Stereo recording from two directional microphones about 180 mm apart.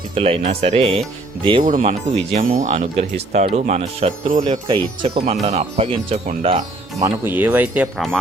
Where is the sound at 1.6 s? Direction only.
50° right (ahead or behind).